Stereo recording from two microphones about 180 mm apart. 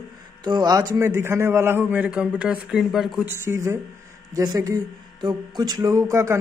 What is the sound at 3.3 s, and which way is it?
A man's voice, 15° right (ahead or behind).